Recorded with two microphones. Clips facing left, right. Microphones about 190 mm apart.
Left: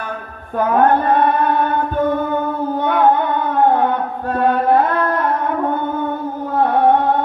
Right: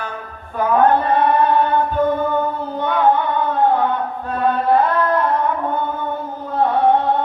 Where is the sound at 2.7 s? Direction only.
55° left (ahead or behind).